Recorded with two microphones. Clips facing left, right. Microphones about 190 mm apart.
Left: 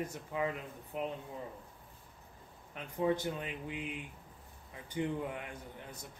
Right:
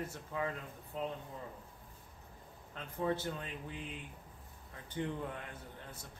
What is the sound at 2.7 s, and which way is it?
A man's voice, 15° left (ahead or behind).